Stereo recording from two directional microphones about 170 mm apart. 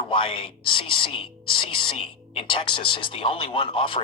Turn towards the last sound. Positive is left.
turn(degrees=30)  # may be behind; listen again after turning